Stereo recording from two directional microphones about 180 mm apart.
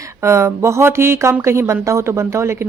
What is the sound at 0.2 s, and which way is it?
A woman's voice, 15° right (ahead or behind).